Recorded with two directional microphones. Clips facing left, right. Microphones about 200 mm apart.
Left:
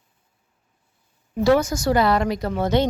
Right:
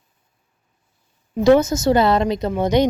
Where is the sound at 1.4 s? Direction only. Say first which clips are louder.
Right 4 dB; 20° right (ahead or behind).